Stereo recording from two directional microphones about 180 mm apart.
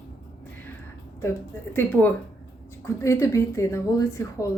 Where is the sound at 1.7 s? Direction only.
10° left (ahead or behind).